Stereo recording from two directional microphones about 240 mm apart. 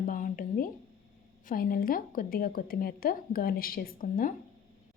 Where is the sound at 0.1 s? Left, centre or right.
Left.